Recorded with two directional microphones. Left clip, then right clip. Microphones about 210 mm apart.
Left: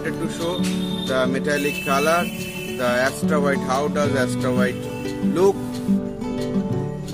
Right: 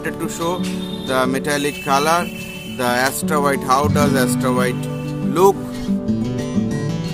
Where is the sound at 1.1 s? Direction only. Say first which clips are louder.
Right 3 dB; 50° right (ahead or behind).